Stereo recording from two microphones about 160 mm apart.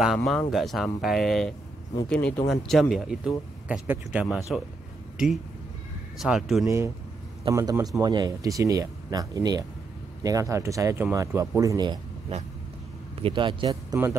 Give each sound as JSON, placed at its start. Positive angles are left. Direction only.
{"t": 0.0, "sound": "speech", "side_deg": 0}
{"t": 6.1, "sound": "speech", "side_deg": 0}
{"t": 7.4, "sound": "speech", "side_deg": -20}
{"t": 13.2, "sound": "speech", "side_deg": -30}